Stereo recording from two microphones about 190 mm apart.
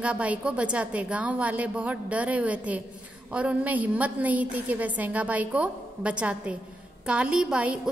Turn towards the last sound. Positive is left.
turn(degrees=-5)  # may be behind; listen again after turning